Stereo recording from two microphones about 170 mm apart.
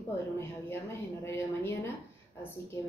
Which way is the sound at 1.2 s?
15° left (ahead or behind).